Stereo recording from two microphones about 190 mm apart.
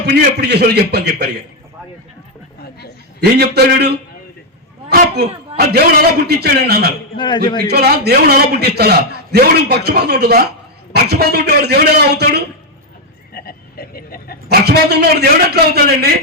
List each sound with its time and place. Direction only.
0.0 s a man's voice: 60° right (ahead or behind)
3.2 s a man's voice: 60° right (ahead or behind)
7.2 s a man's voice: 25° left (ahead or behind)
7.7 s a man's voice: 55° right (ahead or behind)
13.3 s a sound: 55° left (ahead or behind)
14.5 s a man's voice: 60° right (ahead or behind)